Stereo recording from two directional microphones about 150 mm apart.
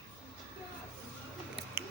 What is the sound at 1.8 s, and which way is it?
Scissors, 15° right (ahead or behind).